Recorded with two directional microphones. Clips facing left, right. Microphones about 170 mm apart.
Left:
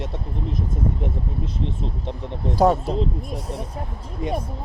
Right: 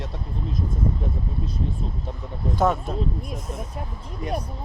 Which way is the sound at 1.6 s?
25° left (ahead or behind).